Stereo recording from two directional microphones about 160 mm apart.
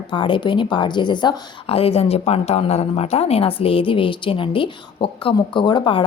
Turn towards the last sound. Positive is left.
turn(degrees=30)  # may be behind; listen again after turning